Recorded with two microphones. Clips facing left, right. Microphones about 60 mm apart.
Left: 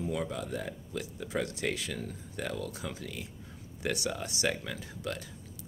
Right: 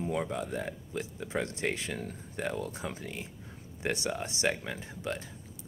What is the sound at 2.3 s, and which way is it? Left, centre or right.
Speech, right.